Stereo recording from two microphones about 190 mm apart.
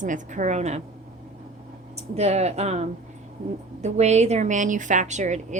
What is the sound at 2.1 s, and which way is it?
A woman's voice, 35° right (ahead or behind).